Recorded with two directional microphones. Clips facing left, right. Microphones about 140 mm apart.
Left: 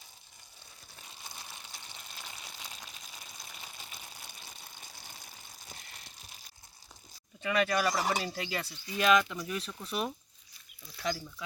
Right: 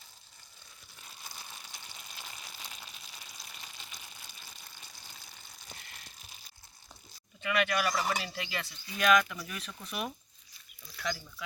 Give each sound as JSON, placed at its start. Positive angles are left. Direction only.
{"t": 1.4, "sound": "a sound", "side_deg": 5}
{"t": 7.4, "sound": "speech", "side_deg": 35}
{"t": 9.0, "sound": "speech", "side_deg": 25}